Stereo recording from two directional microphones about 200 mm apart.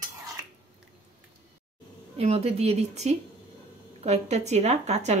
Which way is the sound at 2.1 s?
30° right (ahead or behind).